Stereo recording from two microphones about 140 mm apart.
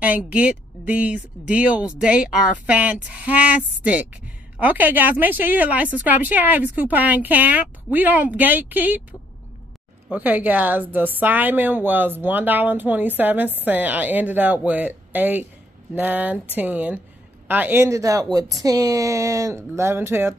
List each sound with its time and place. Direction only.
0.0 s a woman's voice: 10° right (ahead or behind)
10.0 s a woman's voice: 10° right (ahead or behind)